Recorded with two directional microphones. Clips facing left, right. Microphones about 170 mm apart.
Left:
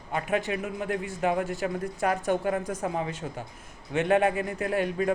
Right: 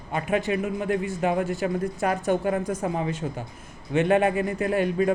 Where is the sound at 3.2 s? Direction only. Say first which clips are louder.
Right 5 dB; 20° right (ahead or behind).